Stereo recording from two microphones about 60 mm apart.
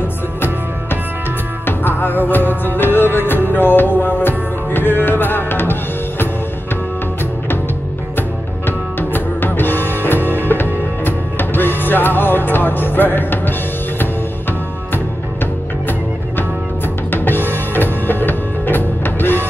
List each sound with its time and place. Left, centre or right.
1.7 s music: left
8.2 s music: left
17.1 s music: left